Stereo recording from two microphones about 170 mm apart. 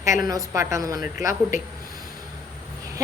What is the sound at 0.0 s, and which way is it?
A woman's voice, 20° right (ahead or behind).